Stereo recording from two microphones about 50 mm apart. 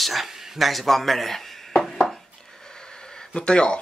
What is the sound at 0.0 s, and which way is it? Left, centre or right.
Speech, centre.